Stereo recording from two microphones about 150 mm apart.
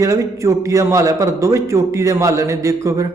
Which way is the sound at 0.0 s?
20° right (ahead or behind).